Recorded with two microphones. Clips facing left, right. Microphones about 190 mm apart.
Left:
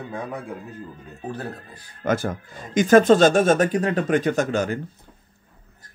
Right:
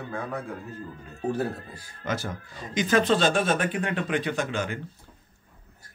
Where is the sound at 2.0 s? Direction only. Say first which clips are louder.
Left 8 dB; 50° left (ahead or behind).